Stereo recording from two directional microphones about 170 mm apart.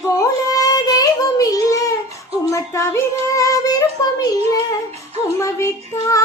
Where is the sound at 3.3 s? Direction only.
20° left (ahead or behind).